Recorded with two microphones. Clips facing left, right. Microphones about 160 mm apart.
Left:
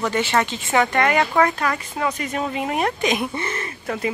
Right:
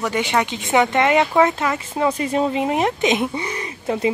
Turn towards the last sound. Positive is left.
turn(degrees=-20)  # may be behind; listen again after turning